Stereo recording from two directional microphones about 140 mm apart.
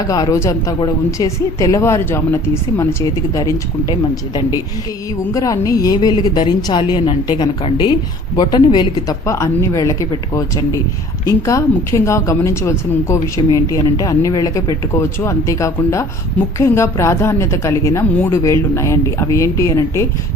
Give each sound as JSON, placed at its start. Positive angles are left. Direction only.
{"t": 0.1, "sound": "a woman's voice", "side_deg": 25}